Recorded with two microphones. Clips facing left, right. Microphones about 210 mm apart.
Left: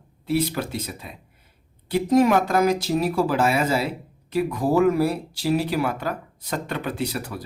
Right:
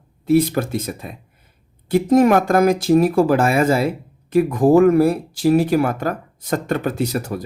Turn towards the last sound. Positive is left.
turn(degrees=-45)  # may be behind; listen again after turning